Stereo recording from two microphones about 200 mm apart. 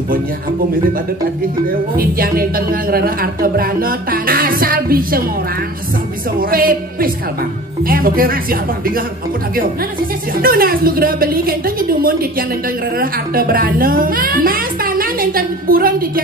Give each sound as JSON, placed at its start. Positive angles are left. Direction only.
{"t": 1.7, "sound": "a woman's voice", "side_deg": -45}
{"t": 6.5, "sound": "a woman's voice", "side_deg": -45}
{"t": 10.3, "sound": "a woman's voice", "side_deg": -45}